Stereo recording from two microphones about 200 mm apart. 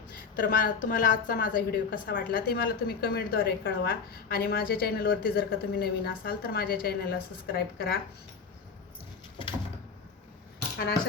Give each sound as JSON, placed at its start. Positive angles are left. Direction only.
{"t": 0.3, "sound": "a woman's voice", "side_deg": 45}